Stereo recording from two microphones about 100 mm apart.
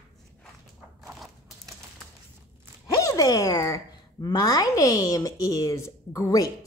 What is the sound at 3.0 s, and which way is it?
A woman's voice, 35° left (ahead or behind).